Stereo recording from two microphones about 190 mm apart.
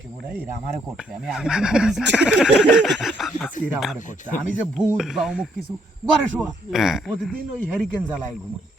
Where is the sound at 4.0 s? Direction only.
40° left (ahead or behind).